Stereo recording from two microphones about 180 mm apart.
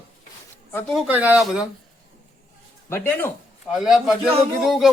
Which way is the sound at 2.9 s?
10° left (ahead or behind).